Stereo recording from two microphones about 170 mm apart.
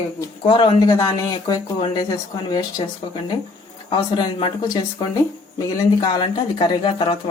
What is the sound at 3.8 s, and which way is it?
Speech, 25° left (ahead or behind).